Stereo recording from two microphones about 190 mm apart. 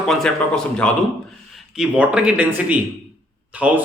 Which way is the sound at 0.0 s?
Centre (ahead or behind).